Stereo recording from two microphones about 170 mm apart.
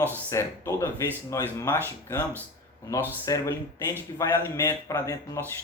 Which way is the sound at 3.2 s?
20° left (ahead or behind).